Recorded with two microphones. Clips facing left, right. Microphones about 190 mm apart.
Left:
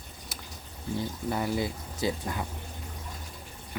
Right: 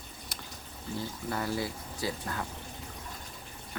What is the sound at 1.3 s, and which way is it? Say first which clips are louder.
Speech: left 3 dB; 20° left (ahead or behind).